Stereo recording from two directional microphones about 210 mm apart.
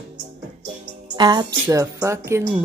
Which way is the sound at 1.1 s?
20° right (ahead or behind).